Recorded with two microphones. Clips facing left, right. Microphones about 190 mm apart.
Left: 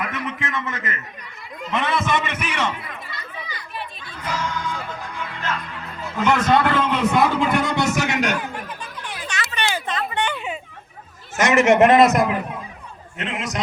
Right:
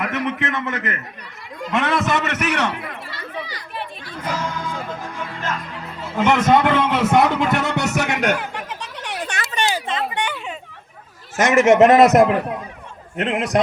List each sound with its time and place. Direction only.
0.0 s a man's voice: 65° right (ahead or behind)
4.3 s music: 35° right (ahead or behind)
5.7 s speech: 30° right (ahead or behind)
6.9 s a sound: 80° right; by 9.8 s 40° right (ahead or behind)
10.3 s hubbub: 5° left (ahead or behind)
11.3 s a man's voice: 50° right (ahead or behind)
12.1 s a man's voice: 65° right (ahead or behind)